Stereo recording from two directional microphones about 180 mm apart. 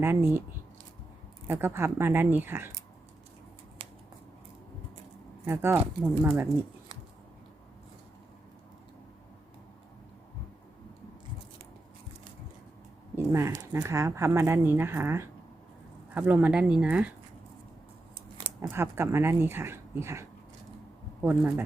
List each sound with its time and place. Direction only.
0.0 s speech: 15° right (ahead or behind)
1.5 s speech: 15° right (ahead or behind)
3.8 s scissors: 35° right (ahead or behind)
5.5 s speech: 15° right (ahead or behind)
13.1 s speech: 15° right (ahead or behind)
18.7 s speech: 15° right (ahead or behind)
21.2 s speech: 10° right (ahead or behind)